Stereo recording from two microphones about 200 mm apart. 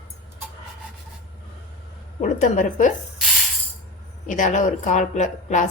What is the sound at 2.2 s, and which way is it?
Speech, 40° left (ahead or behind).